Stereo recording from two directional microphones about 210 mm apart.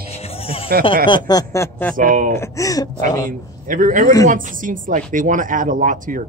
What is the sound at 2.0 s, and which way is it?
Speech, 40° right (ahead or behind).